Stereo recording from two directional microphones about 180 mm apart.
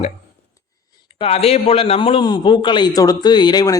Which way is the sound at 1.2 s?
35° left (ahead or behind).